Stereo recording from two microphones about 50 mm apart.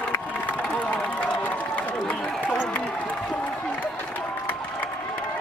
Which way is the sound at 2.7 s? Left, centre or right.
Left.